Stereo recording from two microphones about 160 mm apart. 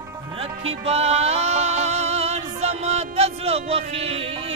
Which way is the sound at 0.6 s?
40° right (ahead or behind).